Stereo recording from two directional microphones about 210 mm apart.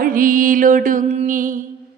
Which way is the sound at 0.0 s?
40° right (ahead or behind).